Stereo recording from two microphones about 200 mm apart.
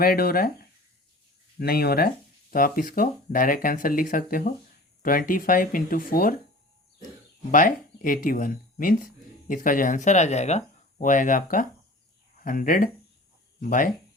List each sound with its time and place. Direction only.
0.0 s speech: 50° left (ahead or behind)
7.5 s speech: 45° left (ahead or behind)